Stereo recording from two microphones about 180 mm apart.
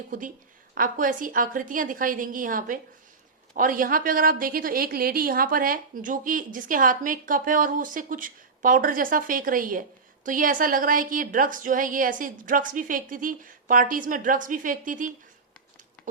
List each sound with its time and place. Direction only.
0.7 s a woman's voice: 50° right (ahead or behind)